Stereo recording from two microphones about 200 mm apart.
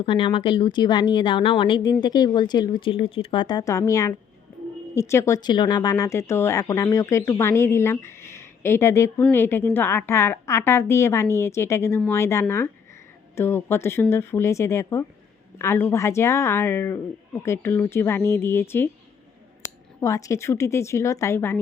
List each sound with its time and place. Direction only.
0.0 s a woman's voice: 25° left (ahead or behind)
20.0 s speech: 15° left (ahead or behind)